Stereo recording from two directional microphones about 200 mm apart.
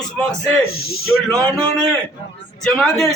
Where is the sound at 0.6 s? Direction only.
90° left.